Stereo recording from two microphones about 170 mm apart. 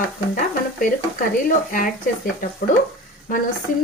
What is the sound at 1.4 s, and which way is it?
Speech, 55° left (ahead or behind).